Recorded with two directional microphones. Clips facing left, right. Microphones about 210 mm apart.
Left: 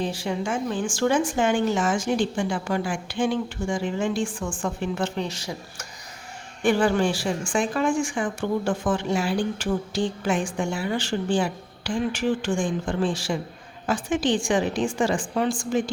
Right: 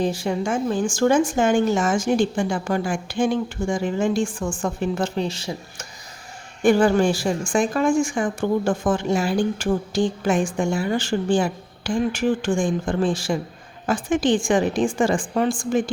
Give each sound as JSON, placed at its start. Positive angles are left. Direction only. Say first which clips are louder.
{"t": 0.0, "sound": "speech", "louder": "right 4 dB", "side_deg": -45}
{"t": 6.6, "sound": "speech", "louder": "right 4 dB", "side_deg": -45}